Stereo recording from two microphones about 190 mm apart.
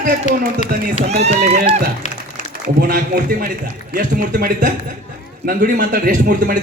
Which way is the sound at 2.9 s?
50° right (ahead or behind).